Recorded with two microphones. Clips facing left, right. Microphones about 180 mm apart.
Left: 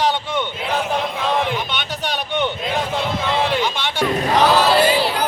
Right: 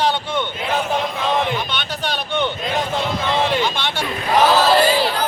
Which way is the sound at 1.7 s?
15° left (ahead or behind).